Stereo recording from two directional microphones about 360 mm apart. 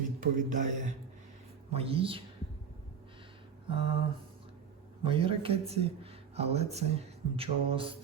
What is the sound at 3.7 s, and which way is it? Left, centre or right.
Mantra, centre.